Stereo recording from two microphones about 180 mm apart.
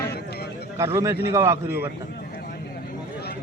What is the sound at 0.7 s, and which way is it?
A man's voice, 15° right (ahead or behind).